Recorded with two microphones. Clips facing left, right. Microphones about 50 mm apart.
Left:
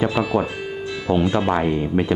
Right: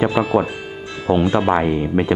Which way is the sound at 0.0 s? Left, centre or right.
Centre.